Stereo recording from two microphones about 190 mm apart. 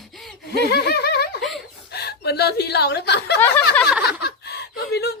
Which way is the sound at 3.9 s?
5° right (ahead or behind).